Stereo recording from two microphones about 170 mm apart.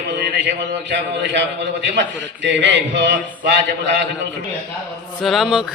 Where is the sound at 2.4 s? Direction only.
90° right.